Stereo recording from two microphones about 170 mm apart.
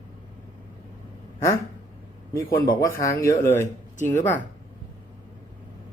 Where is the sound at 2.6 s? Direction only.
20° left (ahead or behind).